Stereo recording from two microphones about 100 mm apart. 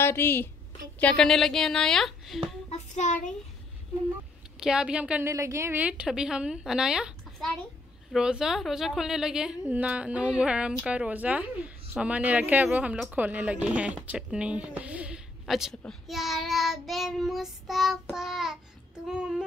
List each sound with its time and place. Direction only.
0.0 s a woman's voice: 25° left (ahead or behind)
0.9 s child singing: 10° left (ahead or behind)
4.6 s speech: 5° right (ahead or behind)
5.2 s a woman's voice: 30° right (ahead or behind)
5.8 s speech: 10° right (ahead or behind)
16.1 s child singing: centre (ahead or behind)
19.0 s speech: 5° right (ahead or behind)